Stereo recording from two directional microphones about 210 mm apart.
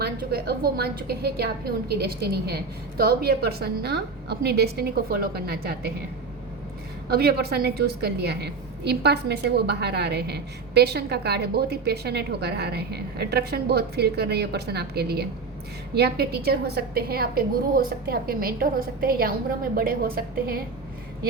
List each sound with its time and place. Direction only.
0.0 s a woman's voice: 45° right (ahead or behind)
7.1 s a woman's voice: 50° right (ahead or behind)